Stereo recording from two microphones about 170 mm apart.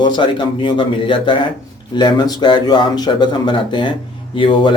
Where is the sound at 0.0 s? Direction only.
30° left (ahead or behind).